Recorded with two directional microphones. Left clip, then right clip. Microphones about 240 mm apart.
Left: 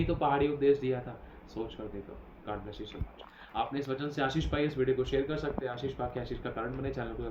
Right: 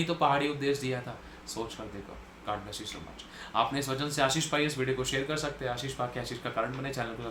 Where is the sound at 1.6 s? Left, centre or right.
Right.